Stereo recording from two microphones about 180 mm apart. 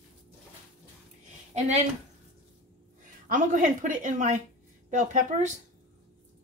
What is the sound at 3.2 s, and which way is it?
A woman's voice, 45° right (ahead or behind).